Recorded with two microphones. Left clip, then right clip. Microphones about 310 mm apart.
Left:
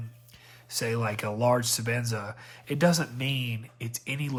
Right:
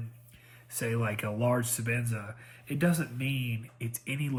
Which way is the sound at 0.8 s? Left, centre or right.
Centre.